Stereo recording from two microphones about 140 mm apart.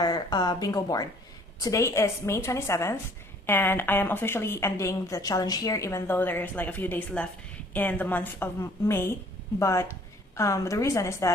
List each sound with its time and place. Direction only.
0.0 s a woman's voice: 30° left (ahead or behind)